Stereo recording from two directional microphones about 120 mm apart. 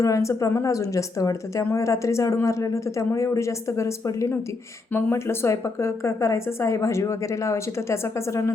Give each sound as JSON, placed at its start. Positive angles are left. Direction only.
{"t": 0.0, "sound": "a woman's voice", "side_deg": 25}